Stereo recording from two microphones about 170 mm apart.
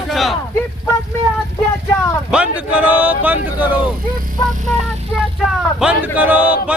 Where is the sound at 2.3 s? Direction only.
5° right (ahead or behind).